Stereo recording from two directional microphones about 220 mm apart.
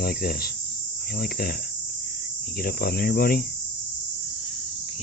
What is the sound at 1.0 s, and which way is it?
Cricket, 45° left (ahead or behind).